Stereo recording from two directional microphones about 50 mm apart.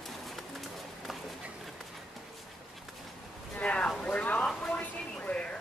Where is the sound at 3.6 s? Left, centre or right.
Left.